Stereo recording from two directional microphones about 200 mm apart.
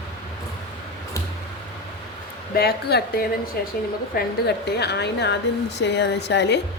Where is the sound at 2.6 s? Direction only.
50° left (ahead or behind).